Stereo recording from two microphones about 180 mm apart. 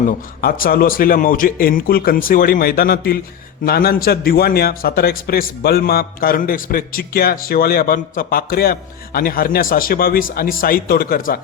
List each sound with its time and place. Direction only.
0.4 s a man's voice: 55° left (ahead or behind)